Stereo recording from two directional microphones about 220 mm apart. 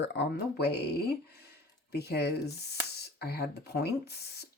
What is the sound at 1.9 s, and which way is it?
Speech, 45° left (ahead or behind).